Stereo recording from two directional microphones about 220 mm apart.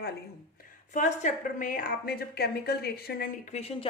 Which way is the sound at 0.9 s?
35° left (ahead or behind).